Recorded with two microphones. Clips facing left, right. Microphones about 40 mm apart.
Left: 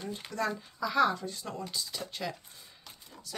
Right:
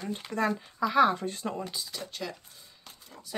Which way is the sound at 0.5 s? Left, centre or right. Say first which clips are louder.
Right 4 dB; right.